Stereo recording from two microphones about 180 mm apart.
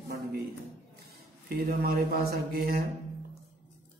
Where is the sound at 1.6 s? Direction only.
55° right (ahead or behind).